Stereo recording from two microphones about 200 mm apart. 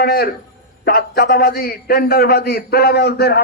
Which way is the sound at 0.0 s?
50° left (ahead or behind).